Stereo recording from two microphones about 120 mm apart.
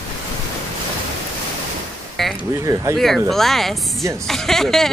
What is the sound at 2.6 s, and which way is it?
Speech, 30° right (ahead or behind).